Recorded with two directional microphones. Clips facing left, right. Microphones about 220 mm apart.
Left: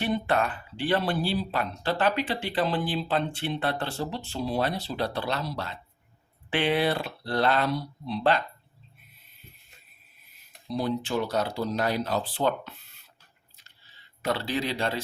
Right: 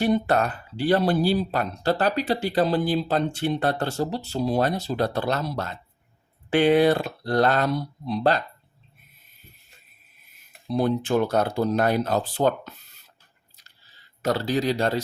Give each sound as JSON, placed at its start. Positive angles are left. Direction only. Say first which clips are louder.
{"t": 0.0, "sound": "speech", "louder": "right 5 dB", "side_deg": -40}
{"t": 10.7, "sound": "speech", "louder": "right 6 dB", "side_deg": -55}
{"t": 13.6, "sound": "a sound", "louder": "right 1 dB", "side_deg": -40}